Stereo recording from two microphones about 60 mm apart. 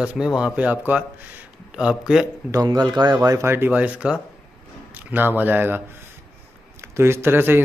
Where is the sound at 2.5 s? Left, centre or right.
Right.